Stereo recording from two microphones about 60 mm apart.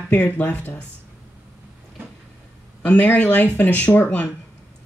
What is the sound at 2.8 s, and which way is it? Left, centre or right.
Speech, left.